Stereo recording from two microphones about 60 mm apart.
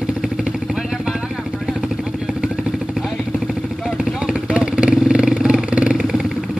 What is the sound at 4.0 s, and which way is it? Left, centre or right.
Vehicle, centre.